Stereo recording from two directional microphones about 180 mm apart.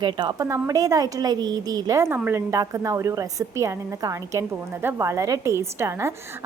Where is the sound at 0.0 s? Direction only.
25° right (ahead or behind).